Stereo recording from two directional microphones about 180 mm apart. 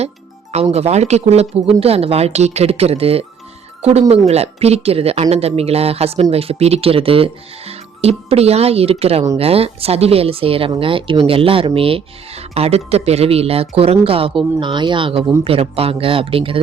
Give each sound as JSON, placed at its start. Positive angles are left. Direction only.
{"t": 0.5, "sound": "speech", "side_deg": -35}